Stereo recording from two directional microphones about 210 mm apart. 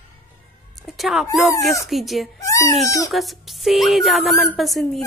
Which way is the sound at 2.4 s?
15° left (ahead or behind).